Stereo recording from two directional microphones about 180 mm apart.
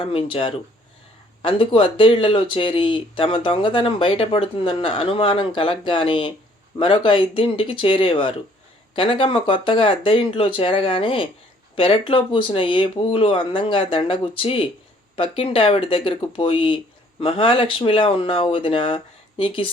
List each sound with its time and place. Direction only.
0.0 s speech: 30° left (ahead or behind)